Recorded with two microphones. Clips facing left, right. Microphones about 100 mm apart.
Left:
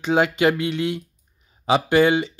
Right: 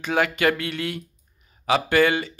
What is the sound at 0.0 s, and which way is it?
Speech, 20° left (ahead or behind).